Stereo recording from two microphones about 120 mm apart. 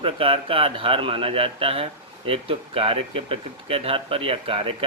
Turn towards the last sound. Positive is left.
turn(degrees=-50)  # may be behind; listen again after turning